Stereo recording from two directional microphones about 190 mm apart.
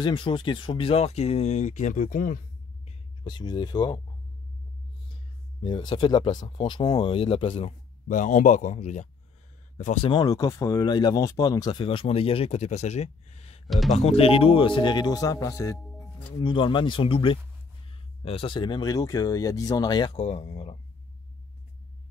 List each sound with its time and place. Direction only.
0.0 s speech: 25° left (ahead or behind); by 2.4 s 45° left (ahead or behind)
3.3 s speech: 25° left (ahead or behind)
5.6 s speech: 25° left (ahead or behind)
10.1 s speech: 20° left (ahead or behind); by 13.6 s 35° left (ahead or behind)
13.7 s speech: centre (ahead or behind)
13.9 s speech: 30° left (ahead or behind)